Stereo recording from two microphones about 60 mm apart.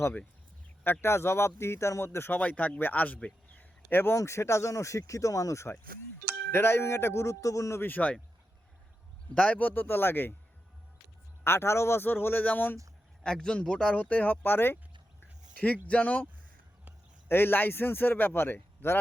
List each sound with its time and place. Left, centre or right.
1.0 s speech: left
2.4 s speech: left
3.2 s a sound: left
4.2 s speech: left
6.5 s speech: left
7.8 s speech: left
9.3 s speech: centre
9.6 s speech: left
11.4 s speech: left
13.2 s speech: centre
14.0 s speech: left
15.5 s speech: left
17.2 s speech: left